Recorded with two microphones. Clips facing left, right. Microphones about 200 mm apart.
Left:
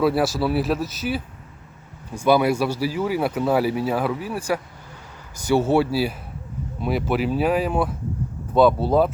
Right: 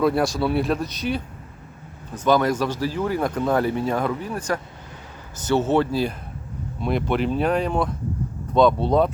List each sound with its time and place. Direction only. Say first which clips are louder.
0.0 s speech: even; 5° left (ahead or behind)